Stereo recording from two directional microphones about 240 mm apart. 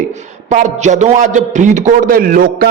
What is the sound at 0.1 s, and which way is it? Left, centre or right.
A man's voice, right.